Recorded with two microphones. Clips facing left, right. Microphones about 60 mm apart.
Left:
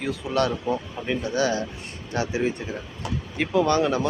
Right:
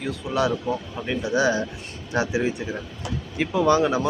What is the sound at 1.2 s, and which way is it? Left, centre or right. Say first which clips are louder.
Speech: right 4 dB; centre.